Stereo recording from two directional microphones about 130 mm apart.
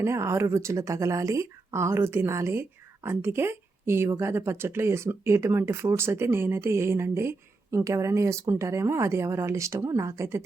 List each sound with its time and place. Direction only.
0.0 s a woman's voice: 20° right (ahead or behind)